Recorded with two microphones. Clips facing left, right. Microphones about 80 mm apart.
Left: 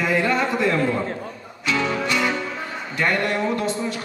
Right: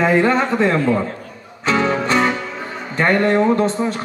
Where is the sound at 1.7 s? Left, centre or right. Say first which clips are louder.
Right 5 dB; right.